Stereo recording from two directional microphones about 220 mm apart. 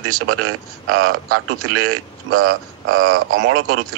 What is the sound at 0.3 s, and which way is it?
A man's voice, 80° right.